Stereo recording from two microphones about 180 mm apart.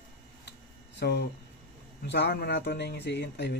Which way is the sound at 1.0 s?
65° left (ahead or behind).